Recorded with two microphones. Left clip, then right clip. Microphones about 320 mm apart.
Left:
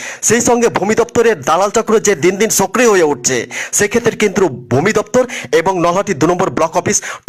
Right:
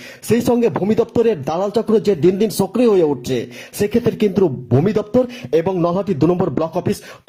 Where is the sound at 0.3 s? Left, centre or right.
Left.